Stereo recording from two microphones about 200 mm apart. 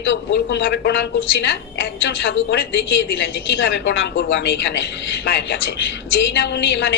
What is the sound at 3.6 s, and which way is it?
A woman's voice, 65° left (ahead or behind).